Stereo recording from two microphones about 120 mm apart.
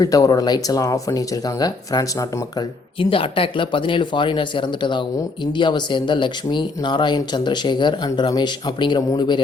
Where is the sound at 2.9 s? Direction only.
50° left (ahead or behind).